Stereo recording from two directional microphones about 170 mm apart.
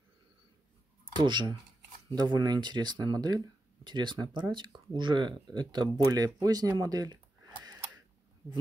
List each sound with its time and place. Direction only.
1.2 s speech: 25° right (ahead or behind)